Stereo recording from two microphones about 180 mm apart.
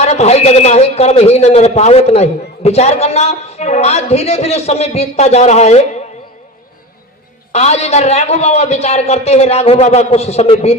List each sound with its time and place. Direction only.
0.0 s a man's voice: 40° left (ahead or behind)
7.5 s a man's voice: 35° left (ahead or behind)